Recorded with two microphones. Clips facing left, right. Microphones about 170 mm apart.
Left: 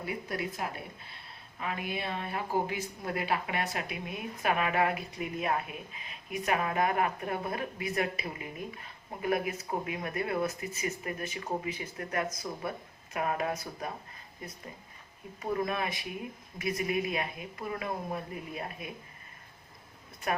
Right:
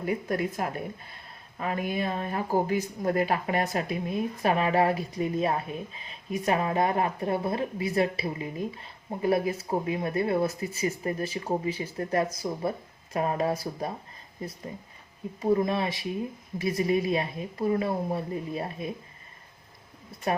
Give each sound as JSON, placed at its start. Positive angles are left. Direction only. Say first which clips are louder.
{"t": 0.0, "sound": "a woman's voice", "louder": "right 7 dB", "side_deg": -45}
{"t": 15.4, "sound": "speech", "louder": "right 7 dB", "side_deg": -25}
{"t": 20.3, "sound": "speech", "louder": "right 4 dB", "side_deg": -30}